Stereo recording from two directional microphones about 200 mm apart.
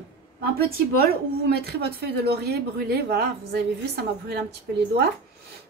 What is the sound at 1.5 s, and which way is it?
Speech, 55° right (ahead or behind).